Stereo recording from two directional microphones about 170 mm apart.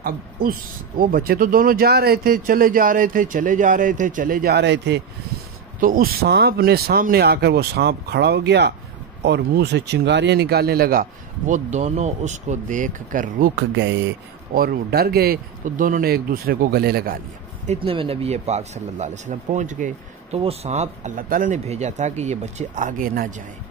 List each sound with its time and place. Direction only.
0.0 s speech: 60° right (ahead or behind); by 5.0 s 90° right
5.8 s speech: 55° right (ahead or behind)
13.6 s speech: 90° right
14.5 s speech: 60° right (ahead or behind)
17.6 s speech: 30° right (ahead or behind)
21.2 s speech: 55° right (ahead or behind)